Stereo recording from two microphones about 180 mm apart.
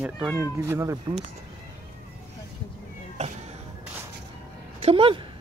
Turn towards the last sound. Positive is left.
turn(degrees=-30)  # may be behind; listen again after turning